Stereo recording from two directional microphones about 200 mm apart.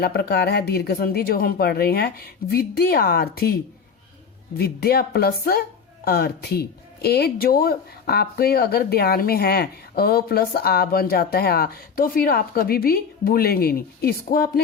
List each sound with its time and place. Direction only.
0.0 s speech: 50° left (ahead or behind)